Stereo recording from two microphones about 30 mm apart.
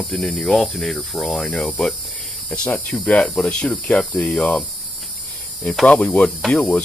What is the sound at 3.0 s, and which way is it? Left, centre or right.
Speech, left.